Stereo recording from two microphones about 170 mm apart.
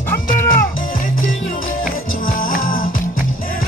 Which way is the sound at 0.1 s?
15° left (ahead or behind).